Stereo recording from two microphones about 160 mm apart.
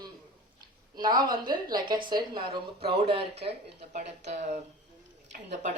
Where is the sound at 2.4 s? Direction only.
75° right (ahead or behind).